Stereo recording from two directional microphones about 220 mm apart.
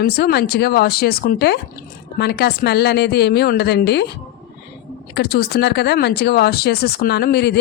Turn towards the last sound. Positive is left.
turn(degrees=50)  # may be behind; listen again after turning